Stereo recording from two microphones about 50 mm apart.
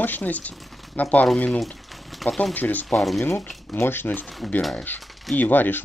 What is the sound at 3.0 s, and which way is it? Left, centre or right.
Speech, centre.